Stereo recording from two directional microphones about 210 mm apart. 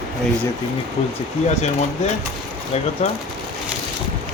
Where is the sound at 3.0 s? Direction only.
30° left (ahead or behind).